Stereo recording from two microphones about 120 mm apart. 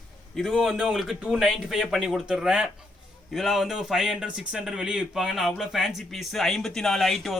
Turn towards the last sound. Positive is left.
turn(degrees=0)  # may be behind; listen again after turning